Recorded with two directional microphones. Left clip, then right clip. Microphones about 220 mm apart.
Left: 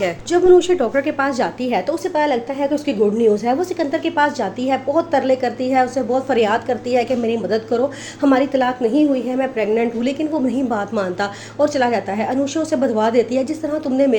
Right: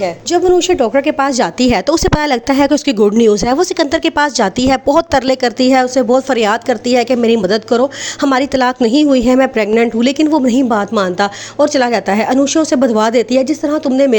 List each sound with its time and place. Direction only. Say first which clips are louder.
0.3 s a woman's voice: right 1 dB; 30° right (ahead or behind)